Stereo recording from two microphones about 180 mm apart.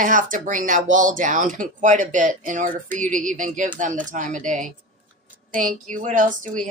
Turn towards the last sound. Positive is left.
turn(degrees=-45)  # may be behind; listen again after turning